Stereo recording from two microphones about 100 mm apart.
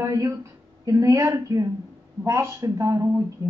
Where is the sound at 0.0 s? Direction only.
30° right (ahead or behind).